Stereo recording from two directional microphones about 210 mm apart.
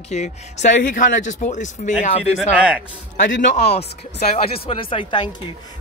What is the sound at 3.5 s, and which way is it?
Speech, 30° left (ahead or behind).